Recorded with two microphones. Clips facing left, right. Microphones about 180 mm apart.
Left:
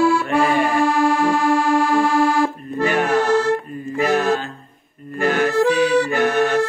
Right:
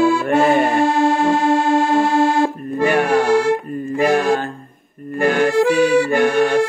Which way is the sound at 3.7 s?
50° right (ahead or behind).